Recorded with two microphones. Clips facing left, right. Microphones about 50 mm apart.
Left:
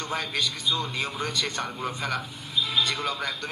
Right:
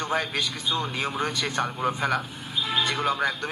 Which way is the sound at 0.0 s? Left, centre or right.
Centre.